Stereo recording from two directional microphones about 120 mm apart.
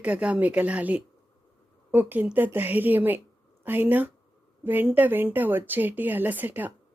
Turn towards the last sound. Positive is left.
turn(degrees=-15)  # may be behind; listen again after turning